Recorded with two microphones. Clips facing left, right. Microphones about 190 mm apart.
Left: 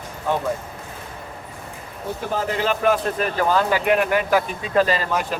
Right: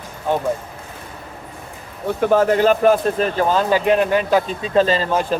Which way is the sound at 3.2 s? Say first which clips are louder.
Right 2 dB; 25° right (ahead or behind).